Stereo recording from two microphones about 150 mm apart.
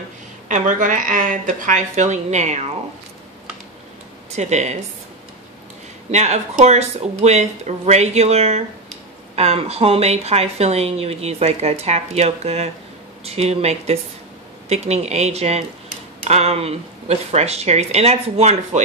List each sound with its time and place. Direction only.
0.5 s speech: 60° right (ahead or behind)
4.3 s a woman's voice: 50° right (ahead or behind)
6.1 s a woman's voice: 50° right (ahead or behind)